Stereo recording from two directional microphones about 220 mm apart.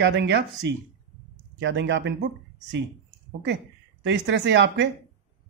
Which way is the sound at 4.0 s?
55° right (ahead or behind).